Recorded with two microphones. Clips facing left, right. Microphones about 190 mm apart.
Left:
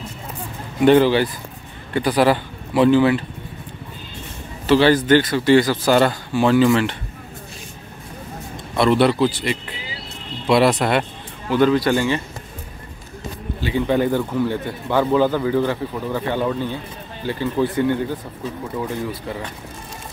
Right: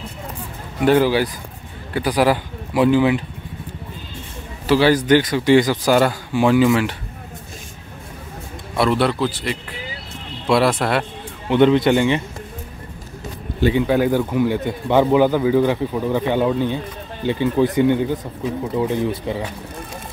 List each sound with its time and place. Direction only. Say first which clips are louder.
0.8 s a man's voice: left 2 dB; 10° right (ahead or behind)
4.6 s a man's voice: even; 10° right (ahead or behind)
8.7 s speech: left 2 dB; 5° right (ahead or behind)
11.4 s speech: right 2 dB; 25° right (ahead or behind)
13.7 s a man's voice: left 1 dB; 5° right (ahead or behind)